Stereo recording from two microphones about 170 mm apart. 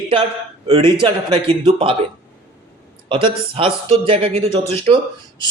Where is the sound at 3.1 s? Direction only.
30° right (ahead or behind).